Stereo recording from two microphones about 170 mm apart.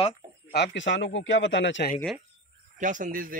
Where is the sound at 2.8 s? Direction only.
50° right (ahead or behind).